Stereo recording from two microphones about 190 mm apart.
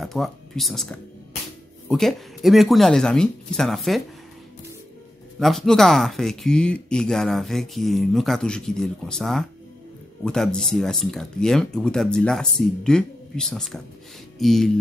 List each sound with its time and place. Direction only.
0.0 s speech: centre (ahead or behind)
5.4 s speech: centre (ahead or behind)